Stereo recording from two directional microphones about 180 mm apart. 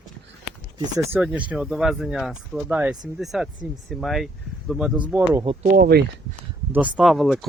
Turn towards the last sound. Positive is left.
turn(degrees=0)  # may be behind; listen again after turning